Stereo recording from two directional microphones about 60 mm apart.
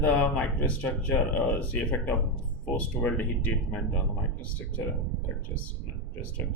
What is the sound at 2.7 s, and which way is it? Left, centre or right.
Speech, left.